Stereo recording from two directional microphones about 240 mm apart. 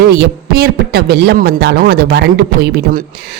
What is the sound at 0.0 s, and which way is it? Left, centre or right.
Speech, right.